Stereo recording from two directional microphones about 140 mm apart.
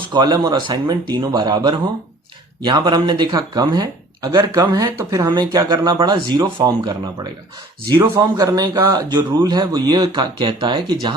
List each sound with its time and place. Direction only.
0.1 s a man's voice: 30° right (ahead or behind)